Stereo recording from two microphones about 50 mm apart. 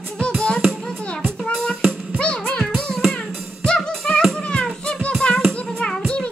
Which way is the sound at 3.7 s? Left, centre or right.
Centre.